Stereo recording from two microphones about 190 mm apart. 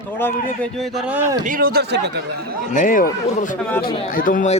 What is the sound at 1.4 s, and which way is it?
Speech, 45° right (ahead or behind).